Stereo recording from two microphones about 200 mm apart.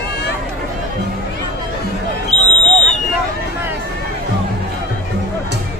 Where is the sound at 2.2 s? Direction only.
35° left (ahead or behind).